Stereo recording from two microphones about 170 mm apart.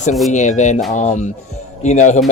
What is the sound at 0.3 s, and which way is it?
Speech, 45° left (ahead or behind).